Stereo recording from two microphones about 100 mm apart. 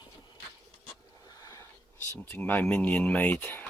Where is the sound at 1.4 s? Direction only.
30° left (ahead or behind).